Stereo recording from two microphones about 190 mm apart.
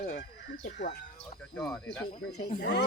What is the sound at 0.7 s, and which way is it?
Speech, 65° left (ahead or behind).